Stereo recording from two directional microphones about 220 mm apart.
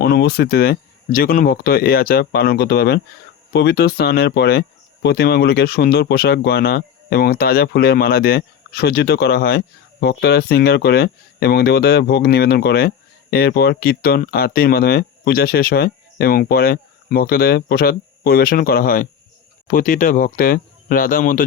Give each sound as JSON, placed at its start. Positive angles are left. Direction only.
{"t": 0.0, "sound": "speech", "side_deg": 45}